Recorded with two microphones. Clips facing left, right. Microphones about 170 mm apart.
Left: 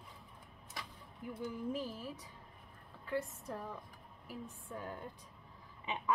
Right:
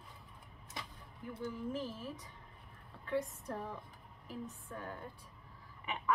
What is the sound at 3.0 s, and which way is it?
Speech, centre (ahead or behind).